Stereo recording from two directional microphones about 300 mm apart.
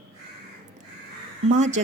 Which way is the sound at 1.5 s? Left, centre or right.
Right.